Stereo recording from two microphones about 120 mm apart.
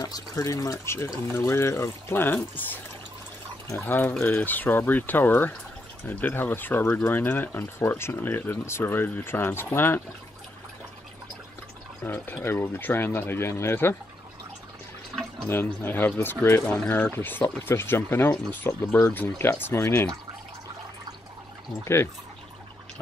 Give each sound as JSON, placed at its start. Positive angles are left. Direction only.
{"t": 0.0, "sound": "speech", "side_deg": 30}
{"t": 12.0, "sound": "speech", "side_deg": 20}
{"t": 15.4, "sound": "speech", "side_deg": 20}
{"t": 21.8, "sound": "speech", "side_deg": 20}